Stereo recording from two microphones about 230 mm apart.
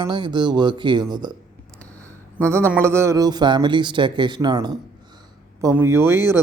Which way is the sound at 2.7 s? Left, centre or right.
Centre.